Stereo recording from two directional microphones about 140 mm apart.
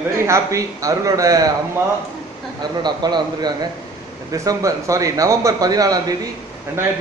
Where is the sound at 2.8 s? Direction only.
30° right (ahead or behind).